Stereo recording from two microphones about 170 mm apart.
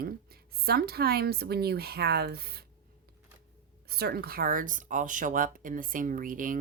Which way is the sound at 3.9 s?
65° right (ahead or behind).